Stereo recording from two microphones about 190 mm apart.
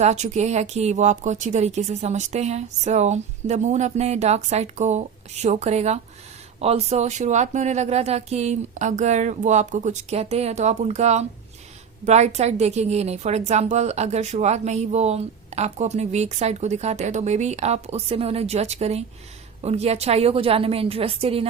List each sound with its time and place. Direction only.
0.0 s a woman's voice: 35° right (ahead or behind)